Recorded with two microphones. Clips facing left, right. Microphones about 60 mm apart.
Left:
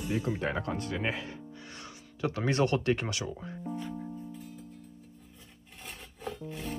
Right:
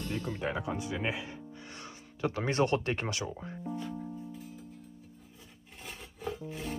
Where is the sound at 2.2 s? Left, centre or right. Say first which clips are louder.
Left 1 dB; right.